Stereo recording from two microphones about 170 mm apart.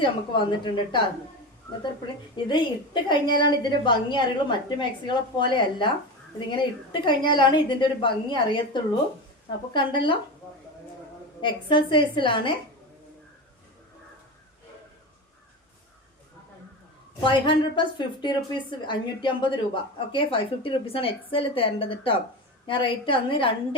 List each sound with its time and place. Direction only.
0.0 s a woman's voice: 25° left (ahead or behind)
2.3 s a woman's voice: 25° left (ahead or behind)
11.3 s a woman's voice: 30° left (ahead or behind)
17.2 s a woman's voice: 30° left (ahead or behind)